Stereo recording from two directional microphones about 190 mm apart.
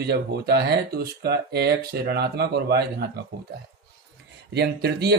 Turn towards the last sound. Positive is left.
turn(degrees=-60)  # may be behind; listen again after turning